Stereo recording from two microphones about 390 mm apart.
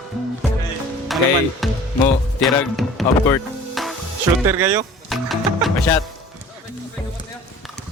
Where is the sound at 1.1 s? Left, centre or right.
Centre.